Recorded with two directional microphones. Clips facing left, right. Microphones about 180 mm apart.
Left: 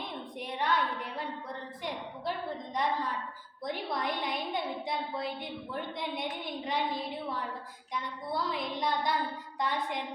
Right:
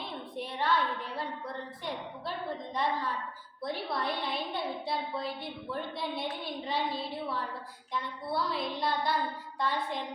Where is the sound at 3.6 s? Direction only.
15° left (ahead or behind).